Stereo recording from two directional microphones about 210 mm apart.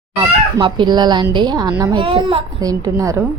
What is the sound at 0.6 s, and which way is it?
A woman's voice, 20° right (ahead or behind).